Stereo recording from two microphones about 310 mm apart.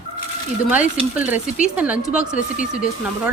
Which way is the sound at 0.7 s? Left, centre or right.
Centre.